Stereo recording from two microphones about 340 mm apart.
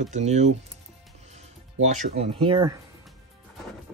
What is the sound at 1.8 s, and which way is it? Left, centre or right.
Speech, right.